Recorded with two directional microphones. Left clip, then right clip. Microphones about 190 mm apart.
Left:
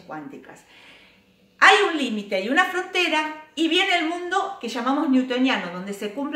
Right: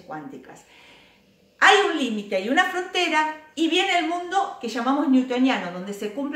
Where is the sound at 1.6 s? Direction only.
10° left (ahead or behind).